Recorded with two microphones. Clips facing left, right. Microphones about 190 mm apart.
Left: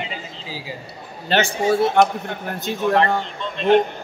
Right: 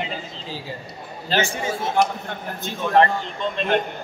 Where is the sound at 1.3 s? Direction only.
70° left (ahead or behind).